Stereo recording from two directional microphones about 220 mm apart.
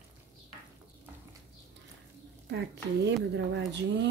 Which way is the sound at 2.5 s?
50° right (ahead or behind).